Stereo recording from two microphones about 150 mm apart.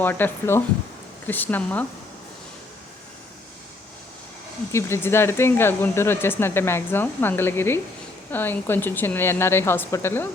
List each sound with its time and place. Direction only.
0.0 s speech: 10° left (ahead or behind)
4.7 s speech: 15° left (ahead or behind)